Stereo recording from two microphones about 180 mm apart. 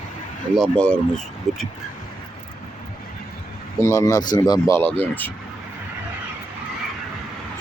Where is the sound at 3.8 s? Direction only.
20° left (ahead or behind).